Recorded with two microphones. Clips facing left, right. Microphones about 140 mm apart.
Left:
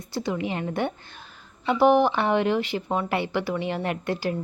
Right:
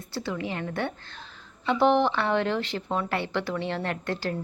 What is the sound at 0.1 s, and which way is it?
Speech, 15° left (ahead or behind).